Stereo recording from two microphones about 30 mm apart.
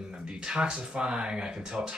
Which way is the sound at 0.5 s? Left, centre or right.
Right.